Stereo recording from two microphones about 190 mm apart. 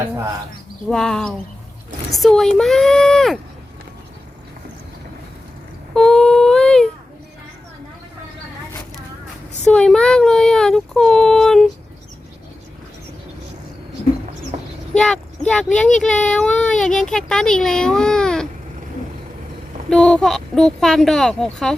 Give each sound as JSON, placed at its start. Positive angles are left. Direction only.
{"t": 0.9, "sound": "speech", "side_deg": 5}
{"t": 5.9, "sound": "a sound", "side_deg": 5}
{"t": 9.6, "sound": "child singing", "side_deg": 5}
{"t": 14.5, "sound": "a sound", "side_deg": -35}
{"t": 14.9, "sound": "speech", "side_deg": 5}
{"t": 19.9, "sound": "child singing", "side_deg": 5}
{"t": 20.8, "sound": "speech", "side_deg": 0}